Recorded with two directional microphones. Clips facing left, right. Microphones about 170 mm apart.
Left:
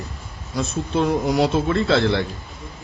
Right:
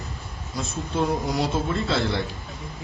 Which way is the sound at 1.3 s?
75° left (ahead or behind).